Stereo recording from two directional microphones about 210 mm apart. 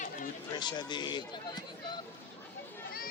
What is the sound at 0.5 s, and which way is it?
Speech, 20° left (ahead or behind).